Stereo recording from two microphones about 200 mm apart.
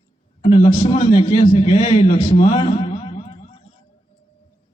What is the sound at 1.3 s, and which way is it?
A man's voice, 25° left (ahead or behind).